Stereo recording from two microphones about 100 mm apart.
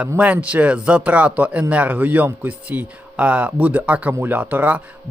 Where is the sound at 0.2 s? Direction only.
15° right (ahead or behind).